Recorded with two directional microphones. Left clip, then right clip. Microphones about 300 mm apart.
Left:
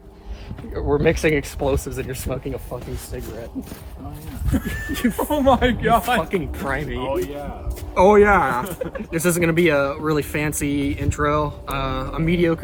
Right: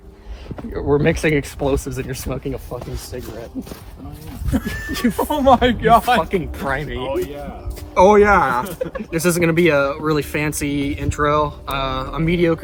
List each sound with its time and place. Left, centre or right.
0.7 s speech: right
4.5 s speech: centre